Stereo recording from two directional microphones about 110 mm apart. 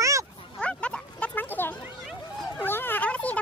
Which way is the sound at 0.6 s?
10° left (ahead or behind).